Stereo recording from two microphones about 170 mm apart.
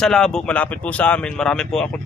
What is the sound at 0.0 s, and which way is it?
Speech, 5° left (ahead or behind).